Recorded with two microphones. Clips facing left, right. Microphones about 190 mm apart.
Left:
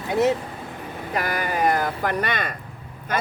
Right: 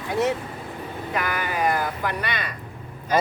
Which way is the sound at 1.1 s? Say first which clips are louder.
Left 2 dB; 40° left (ahead or behind).